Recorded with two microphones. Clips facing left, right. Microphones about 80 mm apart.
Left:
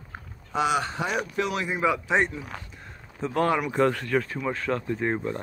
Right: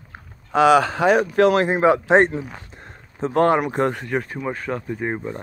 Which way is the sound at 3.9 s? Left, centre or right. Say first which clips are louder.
Right 1 dB; right.